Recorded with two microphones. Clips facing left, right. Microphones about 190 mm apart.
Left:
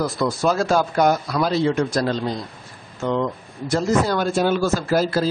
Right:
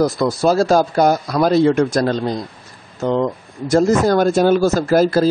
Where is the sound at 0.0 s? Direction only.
35° right (ahead or behind).